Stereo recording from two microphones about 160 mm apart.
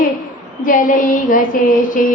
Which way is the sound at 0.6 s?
55° left (ahead or behind).